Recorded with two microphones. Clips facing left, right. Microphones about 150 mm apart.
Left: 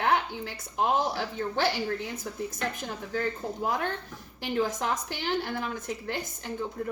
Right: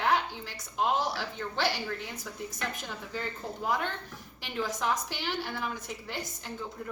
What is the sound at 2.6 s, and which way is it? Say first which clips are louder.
Speech: left 2 dB; 45° left (ahead or behind).